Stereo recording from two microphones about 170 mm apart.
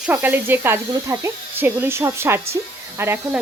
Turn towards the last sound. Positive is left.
turn(degrees=-15)  # may be behind; listen again after turning